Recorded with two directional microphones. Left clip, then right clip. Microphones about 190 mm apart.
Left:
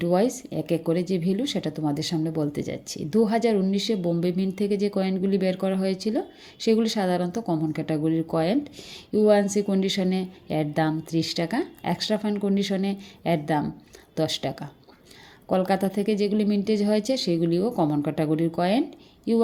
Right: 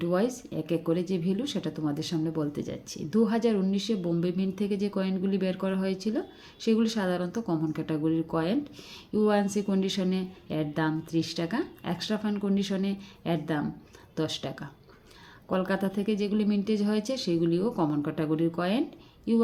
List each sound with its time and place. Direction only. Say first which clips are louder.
0.0 s speech: left 5 dB; 25° left (ahead or behind)